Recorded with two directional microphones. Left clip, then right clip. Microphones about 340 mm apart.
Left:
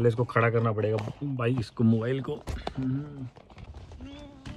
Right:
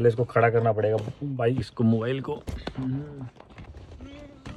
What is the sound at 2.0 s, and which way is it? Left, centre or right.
Speech, right.